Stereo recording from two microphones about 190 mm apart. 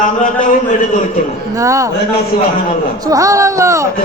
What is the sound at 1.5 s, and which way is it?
Speech, 15° right (ahead or behind).